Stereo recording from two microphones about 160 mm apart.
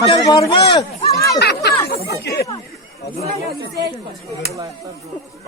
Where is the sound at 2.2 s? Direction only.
90° left.